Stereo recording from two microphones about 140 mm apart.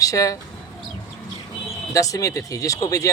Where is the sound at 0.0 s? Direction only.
25° left (ahead or behind).